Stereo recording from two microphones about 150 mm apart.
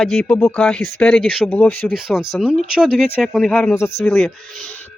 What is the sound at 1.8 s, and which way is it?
Speech, 5° right (ahead or behind).